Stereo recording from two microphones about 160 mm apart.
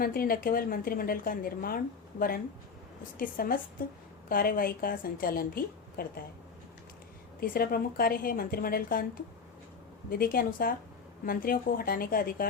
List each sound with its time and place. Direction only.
0.0 s a woman's voice: 65° left (ahead or behind)
7.3 s a woman's voice: 65° left (ahead or behind)
10.1 s a woman's voice: 65° left (ahead or behind)